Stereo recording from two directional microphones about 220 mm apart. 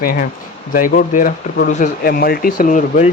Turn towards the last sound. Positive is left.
turn(degrees=35)  # may be behind; listen again after turning